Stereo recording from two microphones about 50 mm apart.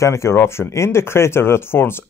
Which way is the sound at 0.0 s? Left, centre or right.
Left.